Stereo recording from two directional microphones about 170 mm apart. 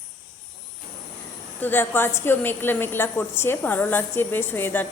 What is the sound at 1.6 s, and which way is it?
A woman's voice, 10° left (ahead or behind).